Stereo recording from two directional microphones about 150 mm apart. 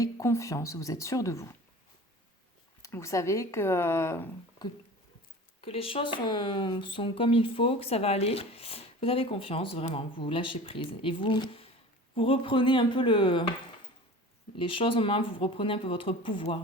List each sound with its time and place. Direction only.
0.0 s speech: 20° left (ahead or behind)
2.8 s speech: 20° left (ahead or behind)
5.5 s speech: 40° left (ahead or behind)
14.6 s speech: 35° left (ahead or behind)